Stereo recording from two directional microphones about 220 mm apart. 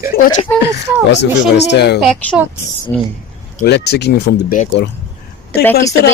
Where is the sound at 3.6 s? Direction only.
50° left (ahead or behind).